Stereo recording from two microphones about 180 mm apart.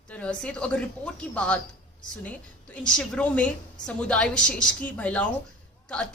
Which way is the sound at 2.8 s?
5° left (ahead or behind).